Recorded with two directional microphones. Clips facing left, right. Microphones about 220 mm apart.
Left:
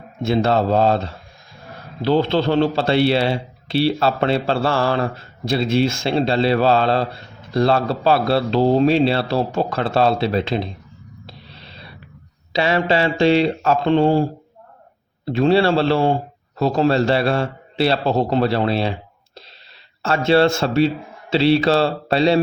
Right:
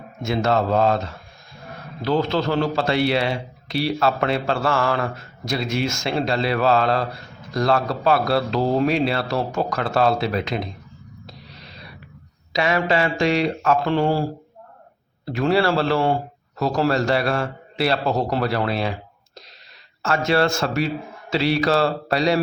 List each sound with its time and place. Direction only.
0.3 s a man's voice: 30° left (ahead or behind)
11.3 s a sound: 30° left (ahead or behind)
12.5 s a man's voice: 30° left (ahead or behind)